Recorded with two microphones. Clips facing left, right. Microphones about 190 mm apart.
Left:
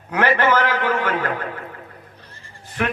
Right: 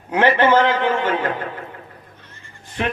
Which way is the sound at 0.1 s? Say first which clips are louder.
Right 3 dB; 25° right (ahead or behind).